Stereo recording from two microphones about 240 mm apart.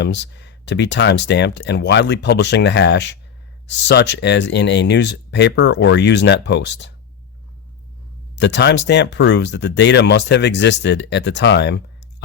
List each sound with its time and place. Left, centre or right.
0.0 s speech: left
8.4 s speech: left